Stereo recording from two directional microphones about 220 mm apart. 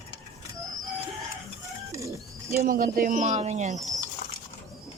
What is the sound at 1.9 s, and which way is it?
Bird, 15° right (ahead or behind).